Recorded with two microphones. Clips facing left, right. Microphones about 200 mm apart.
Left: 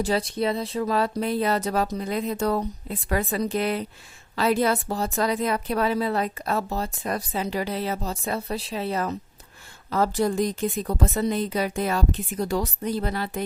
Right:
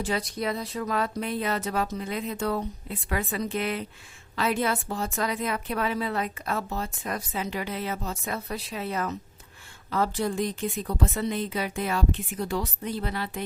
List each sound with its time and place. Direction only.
0.0 s a woman's voice: 30° left (ahead or behind)